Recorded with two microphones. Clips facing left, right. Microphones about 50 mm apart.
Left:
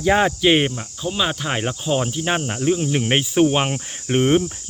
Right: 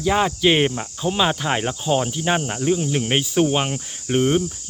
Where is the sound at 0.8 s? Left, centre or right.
Centre.